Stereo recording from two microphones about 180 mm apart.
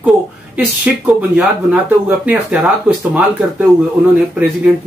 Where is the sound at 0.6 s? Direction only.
10° right (ahead or behind).